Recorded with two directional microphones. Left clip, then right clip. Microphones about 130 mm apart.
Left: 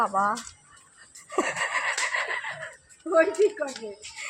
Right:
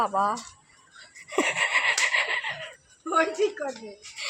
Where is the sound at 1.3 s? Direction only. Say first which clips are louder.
Right 3 dB; 10° right (ahead or behind).